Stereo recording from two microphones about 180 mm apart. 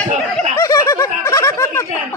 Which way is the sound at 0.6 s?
20° left (ahead or behind).